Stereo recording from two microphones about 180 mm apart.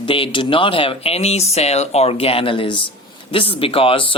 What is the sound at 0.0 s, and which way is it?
Speech, 30° left (ahead or behind).